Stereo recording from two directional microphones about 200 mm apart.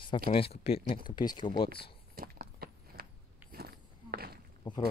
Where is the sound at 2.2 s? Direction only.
50° right (ahead or behind).